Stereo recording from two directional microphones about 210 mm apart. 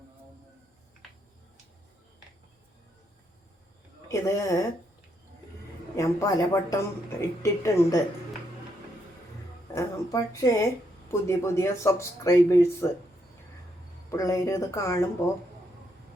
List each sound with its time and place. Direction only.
4.1 s speech: 15° left (ahead or behind)
6.0 s speech: 15° left (ahead or behind)
9.7 s speech: 15° left (ahead or behind)
14.1 s speech: 15° left (ahead or behind)